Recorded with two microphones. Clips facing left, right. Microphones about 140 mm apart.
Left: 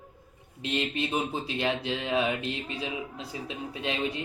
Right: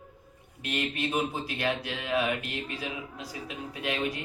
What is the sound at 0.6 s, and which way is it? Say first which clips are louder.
Speech: left 2 dB; 25° left (ahead or behind).